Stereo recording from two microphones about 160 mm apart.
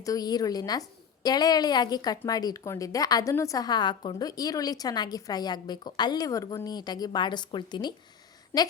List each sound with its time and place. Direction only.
0.0 s a woman's voice: 20° left (ahead or behind)